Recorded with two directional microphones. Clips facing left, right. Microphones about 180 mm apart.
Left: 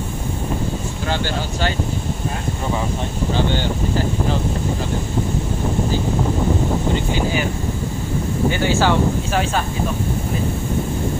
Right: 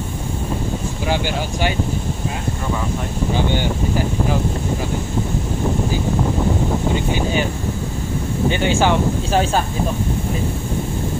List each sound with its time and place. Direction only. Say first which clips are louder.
1.0 s speech: right 2 dB; 15° right (ahead or behind)
8.5 s speech: right 1 dB; 20° right (ahead or behind)
9.3 s speech: right 3 dB; 35° right (ahead or behind)